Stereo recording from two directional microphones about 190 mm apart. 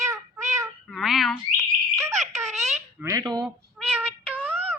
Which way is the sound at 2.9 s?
15° right (ahead or behind).